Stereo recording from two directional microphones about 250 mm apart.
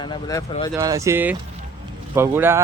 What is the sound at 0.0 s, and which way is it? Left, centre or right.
Speech, centre.